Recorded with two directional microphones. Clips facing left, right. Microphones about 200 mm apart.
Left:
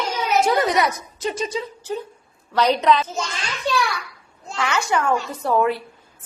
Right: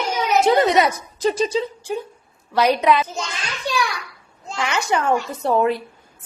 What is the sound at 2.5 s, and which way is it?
Speech, 10° right (ahead or behind).